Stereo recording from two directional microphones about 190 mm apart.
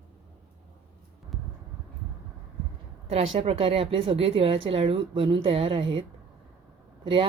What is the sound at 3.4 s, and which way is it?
A woman's voice, 30° right (ahead or behind).